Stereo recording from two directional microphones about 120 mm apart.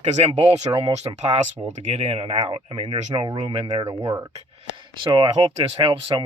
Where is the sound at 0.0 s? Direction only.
65° right (ahead or behind); by 3.4 s 40° right (ahead or behind).